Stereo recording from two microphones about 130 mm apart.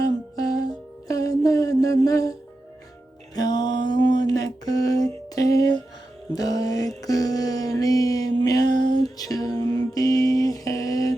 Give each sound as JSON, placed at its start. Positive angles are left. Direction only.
{"t": 1.0, "sound": "music", "side_deg": 25}
{"t": 3.3, "sound": "music", "side_deg": 35}
{"t": 3.8, "sound": "a sound", "side_deg": 35}
{"t": 6.3, "sound": "mantra", "side_deg": 30}